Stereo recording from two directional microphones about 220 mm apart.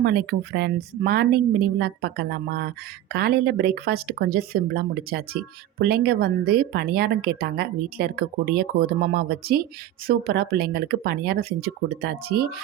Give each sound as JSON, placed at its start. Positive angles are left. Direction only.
{"t": 0.0, "sound": "a woman's voice", "side_deg": -45}